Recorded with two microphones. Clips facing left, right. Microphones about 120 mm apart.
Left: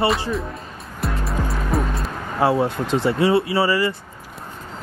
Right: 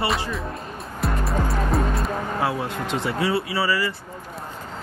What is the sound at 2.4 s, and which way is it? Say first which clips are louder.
Speech: left 11 dB; 35° left (ahead or behind).